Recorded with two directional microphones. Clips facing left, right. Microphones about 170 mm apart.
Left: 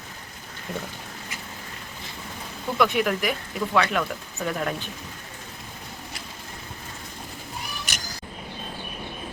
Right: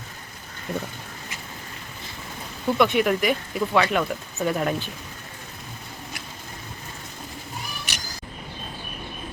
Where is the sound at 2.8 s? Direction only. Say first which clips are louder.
Right 2 dB; centre (ahead or behind).